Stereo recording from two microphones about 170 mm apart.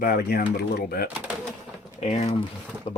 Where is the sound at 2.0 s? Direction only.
40° left (ahead or behind).